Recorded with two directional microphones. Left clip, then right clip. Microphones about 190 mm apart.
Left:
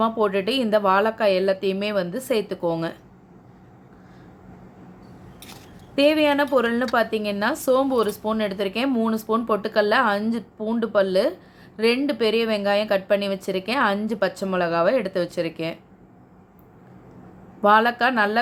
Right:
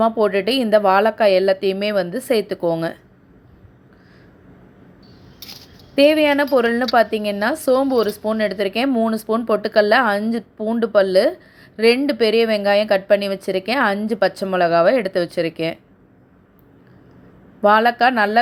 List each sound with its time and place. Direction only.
0.0 s a woman's voice: 20° right (ahead or behind)
6.0 s a woman's voice: 20° right (ahead or behind)
17.6 s a woman's voice: 20° right (ahead or behind)